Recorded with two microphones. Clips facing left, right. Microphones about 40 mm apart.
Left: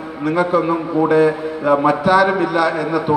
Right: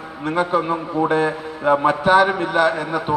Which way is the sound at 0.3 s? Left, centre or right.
Right.